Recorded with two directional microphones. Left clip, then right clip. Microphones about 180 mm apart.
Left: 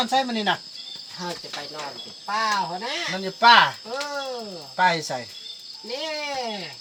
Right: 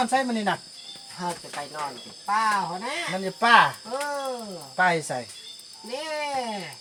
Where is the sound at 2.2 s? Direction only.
10° left (ahead or behind).